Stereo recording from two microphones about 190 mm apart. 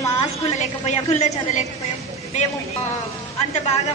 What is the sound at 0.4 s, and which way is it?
Speech, 35° left (ahead or behind).